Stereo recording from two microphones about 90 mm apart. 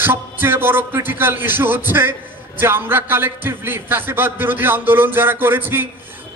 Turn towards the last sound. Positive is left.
turn(degrees=-25)  # may be behind; listen again after turning